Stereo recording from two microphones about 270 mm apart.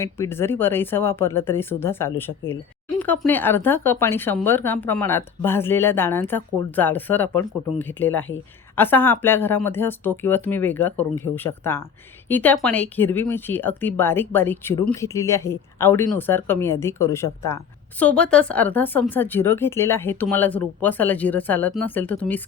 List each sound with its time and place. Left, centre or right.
0.0 s speech: centre